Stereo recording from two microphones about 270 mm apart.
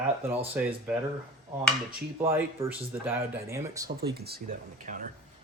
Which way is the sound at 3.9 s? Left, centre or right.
Right.